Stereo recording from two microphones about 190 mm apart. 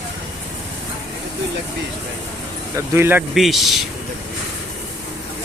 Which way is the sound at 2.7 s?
15° right (ahead or behind).